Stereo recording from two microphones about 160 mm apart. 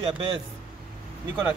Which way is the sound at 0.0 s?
35° right (ahead or behind).